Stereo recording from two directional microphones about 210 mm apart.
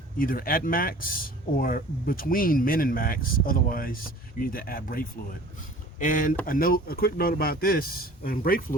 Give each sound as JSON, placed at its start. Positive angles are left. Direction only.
{"t": 0.2, "sound": "speech", "side_deg": 45}